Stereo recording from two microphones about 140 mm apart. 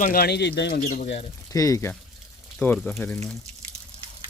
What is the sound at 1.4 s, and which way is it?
Speech, 25° left (ahead or behind).